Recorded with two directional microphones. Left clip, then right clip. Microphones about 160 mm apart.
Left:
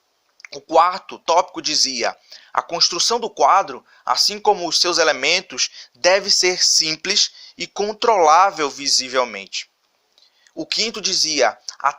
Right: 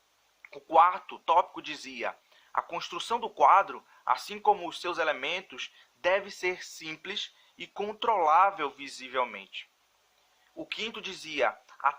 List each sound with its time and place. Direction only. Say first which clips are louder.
0.4 s speech: left 7 dB; 40° left (ahead or behind)
3.3 s speech: left 5 dB; 30° left (ahead or behind); by 7.7 s 45° left (ahead or behind)
7.7 s speech: left 11 dB; 30° left (ahead or behind)